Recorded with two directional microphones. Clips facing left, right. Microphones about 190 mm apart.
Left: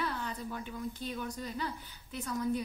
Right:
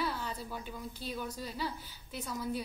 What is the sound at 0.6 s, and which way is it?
Speech, 35° right (ahead or behind).